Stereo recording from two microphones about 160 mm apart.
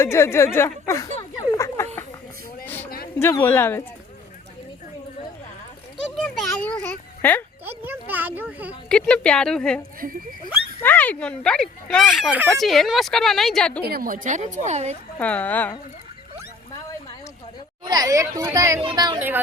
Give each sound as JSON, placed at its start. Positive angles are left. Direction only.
{"t": 0.0, "sound": "speech", "side_deg": 15}
{"t": 1.5, "sound": "a sound", "side_deg": 20}
{"t": 3.2, "sound": "speech", "side_deg": 15}
{"t": 6.1, "sound": "a sound", "side_deg": 5}
{"t": 7.6, "sound": "a sound", "side_deg": -15}
{"t": 8.4, "sound": "speech", "side_deg": -10}
{"t": 8.9, "sound": "speech", "side_deg": 5}
{"t": 10.0, "sound": "speech", "side_deg": -60}
{"t": 10.8, "sound": "speech", "side_deg": 10}
{"t": 13.8, "sound": "speech", "side_deg": -70}
{"t": 15.2, "sound": "speech", "side_deg": 10}
{"t": 17.8, "sound": "speech", "side_deg": -25}